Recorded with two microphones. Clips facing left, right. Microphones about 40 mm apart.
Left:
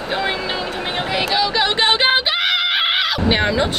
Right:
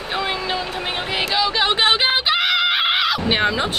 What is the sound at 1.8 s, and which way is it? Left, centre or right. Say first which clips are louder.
Music: left 1 dB; centre.